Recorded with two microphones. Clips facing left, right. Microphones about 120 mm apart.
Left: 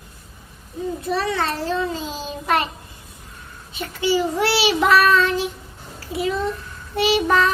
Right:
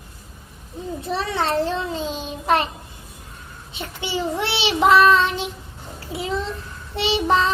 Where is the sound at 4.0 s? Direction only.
25° right (ahead or behind).